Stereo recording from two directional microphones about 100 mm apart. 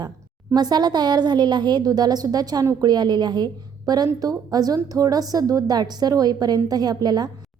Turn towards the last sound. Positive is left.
turn(degrees=-45)  # may be behind; listen again after turning